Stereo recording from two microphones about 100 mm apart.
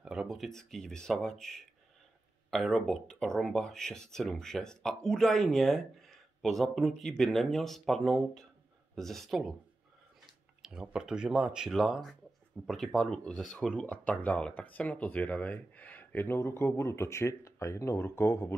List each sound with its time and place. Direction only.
0.0 s speech: 5° right (ahead or behind)
10.6 s speech: 10° right (ahead or behind)
13.7 s speech: 10° left (ahead or behind)